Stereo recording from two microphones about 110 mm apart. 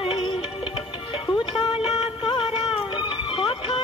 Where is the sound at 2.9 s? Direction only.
45° left (ahead or behind).